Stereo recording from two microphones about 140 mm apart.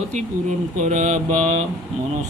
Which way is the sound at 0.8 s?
60° right (ahead or behind).